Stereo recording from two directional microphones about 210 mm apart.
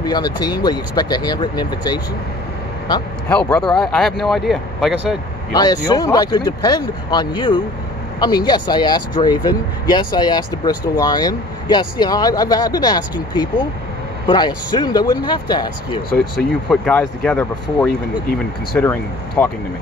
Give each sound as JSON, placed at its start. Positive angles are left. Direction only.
{"t": 0.0, "sound": "speech", "side_deg": 20}
{"t": 3.5, "sound": "speech", "side_deg": 0}
{"t": 5.5, "sound": "speech", "side_deg": 20}
{"t": 16.6, "sound": "speech", "side_deg": 5}